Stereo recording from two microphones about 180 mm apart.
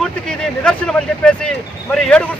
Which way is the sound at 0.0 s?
5° left (ahead or behind).